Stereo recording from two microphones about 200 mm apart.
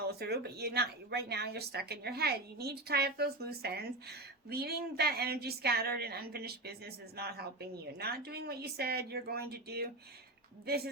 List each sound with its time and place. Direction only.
0.1 s speech: 55° right (ahead or behind)